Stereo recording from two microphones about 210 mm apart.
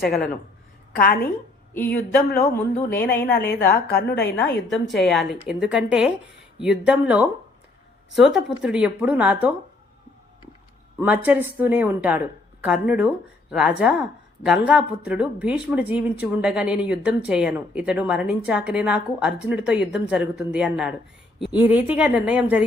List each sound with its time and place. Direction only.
0.9 s a woman's voice: 45° left (ahead or behind)
4.7 s a woman's voice: centre (ahead or behind)
11.0 s a woman's voice: 5° right (ahead or behind)